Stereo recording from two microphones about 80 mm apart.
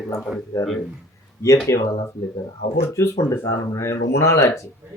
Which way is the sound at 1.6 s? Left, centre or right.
Left.